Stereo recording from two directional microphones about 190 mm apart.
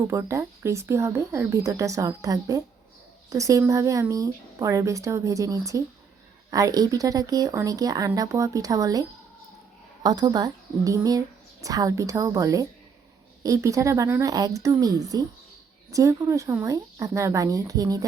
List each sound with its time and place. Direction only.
0.1 s a woman's voice: 15° right (ahead or behind)